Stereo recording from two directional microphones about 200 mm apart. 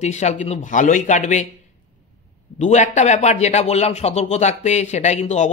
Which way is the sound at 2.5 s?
35° left (ahead or behind).